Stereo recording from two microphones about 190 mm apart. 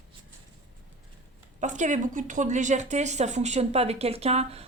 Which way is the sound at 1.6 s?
40° right (ahead or behind).